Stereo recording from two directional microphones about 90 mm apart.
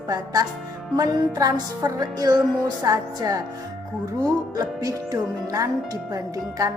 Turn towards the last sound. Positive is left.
turn(degrees=-40)  # may be behind; listen again after turning